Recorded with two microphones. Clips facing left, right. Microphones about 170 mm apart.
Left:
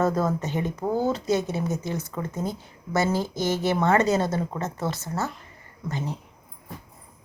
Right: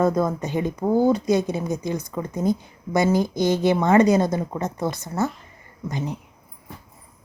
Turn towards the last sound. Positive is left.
turn(degrees=-15)  # may be behind; listen again after turning